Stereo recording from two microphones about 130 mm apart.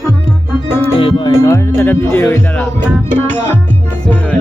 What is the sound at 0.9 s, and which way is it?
Music, 40° left (ahead or behind).